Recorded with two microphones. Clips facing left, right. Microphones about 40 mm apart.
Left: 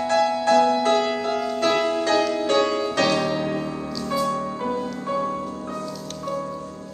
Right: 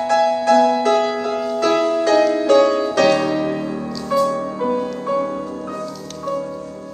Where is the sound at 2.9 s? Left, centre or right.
Right.